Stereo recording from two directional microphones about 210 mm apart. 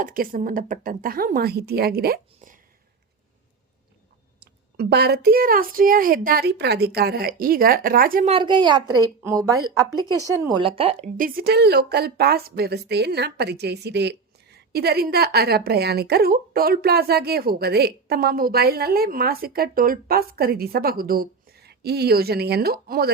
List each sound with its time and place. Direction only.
0.0 s a woman's voice: 45° right (ahead or behind)
4.4 s a woman's voice: 50° right (ahead or behind)
8.3 s a woman's voice: 20° right (ahead or behind)
11.2 s a woman's voice: 45° right (ahead or behind)